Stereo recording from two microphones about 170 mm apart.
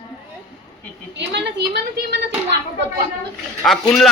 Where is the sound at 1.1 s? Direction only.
90° right.